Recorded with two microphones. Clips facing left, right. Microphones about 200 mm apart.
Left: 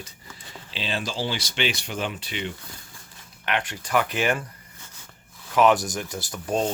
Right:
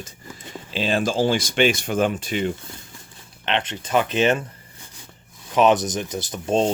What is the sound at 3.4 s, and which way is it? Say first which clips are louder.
Speech: right 3 dB; 25° right (ahead or behind).